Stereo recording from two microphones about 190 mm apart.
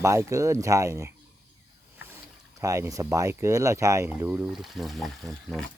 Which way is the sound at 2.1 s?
15° right (ahead or behind).